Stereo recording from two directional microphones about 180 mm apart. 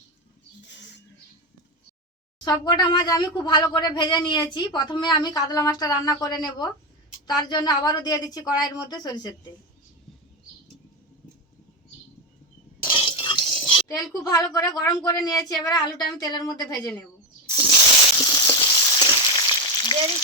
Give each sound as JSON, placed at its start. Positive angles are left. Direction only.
{"t": 2.4, "sound": "speech", "side_deg": 25}
{"t": 12.8, "sound": "a sound", "side_deg": 30}
{"t": 14.3, "sound": "speech", "side_deg": 20}
{"t": 18.2, "sound": "frying", "side_deg": 20}